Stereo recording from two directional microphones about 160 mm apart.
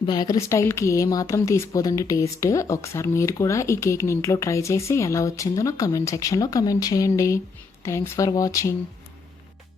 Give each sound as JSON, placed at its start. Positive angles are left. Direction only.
{"t": 0.0, "sound": "a woman's voice", "side_deg": 25}